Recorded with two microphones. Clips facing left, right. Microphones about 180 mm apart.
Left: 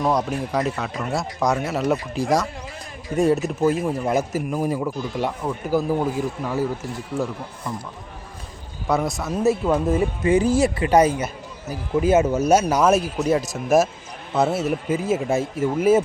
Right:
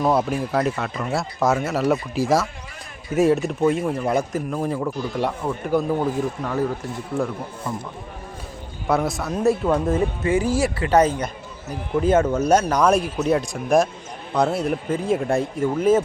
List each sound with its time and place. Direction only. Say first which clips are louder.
0.0 s a man's voice: right 2 dB; 5° right (ahead or behind)
8.9 s a man's voice: right 1 dB; centre (ahead or behind)
10.2 s a man's voice: left 4 dB; 20° left (ahead or behind)